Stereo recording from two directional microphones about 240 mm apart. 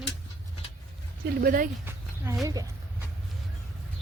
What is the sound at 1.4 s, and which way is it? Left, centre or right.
Speech, right.